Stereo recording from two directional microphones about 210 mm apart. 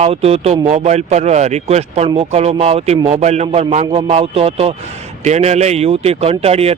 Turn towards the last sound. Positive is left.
turn(degrees=-30)  # may be behind; listen again after turning